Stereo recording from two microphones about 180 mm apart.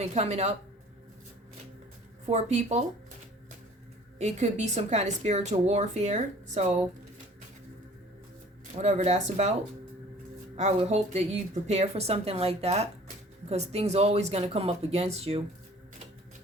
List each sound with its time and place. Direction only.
0.0 s speech: 40° right (ahead or behind)
2.2 s speech: 40° right (ahead or behind)
4.2 s speech: 40° right (ahead or behind)
8.7 s speech: 40° right (ahead or behind)